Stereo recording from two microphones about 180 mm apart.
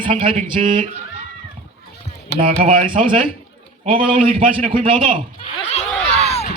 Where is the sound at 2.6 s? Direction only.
30° right (ahead or behind).